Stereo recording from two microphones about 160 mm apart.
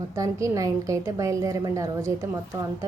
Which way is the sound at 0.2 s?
20° right (ahead or behind).